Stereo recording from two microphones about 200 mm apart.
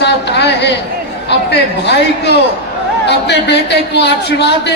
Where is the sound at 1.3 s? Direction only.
60° left (ahead or behind).